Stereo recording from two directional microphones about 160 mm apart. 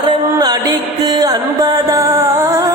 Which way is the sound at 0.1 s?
25° right (ahead or behind).